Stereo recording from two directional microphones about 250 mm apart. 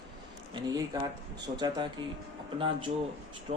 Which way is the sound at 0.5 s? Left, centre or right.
Centre.